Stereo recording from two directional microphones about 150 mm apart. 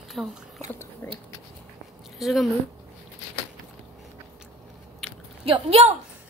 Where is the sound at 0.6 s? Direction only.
15° left (ahead or behind).